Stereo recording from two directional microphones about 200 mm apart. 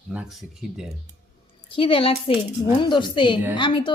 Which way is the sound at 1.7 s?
25° left (ahead or behind).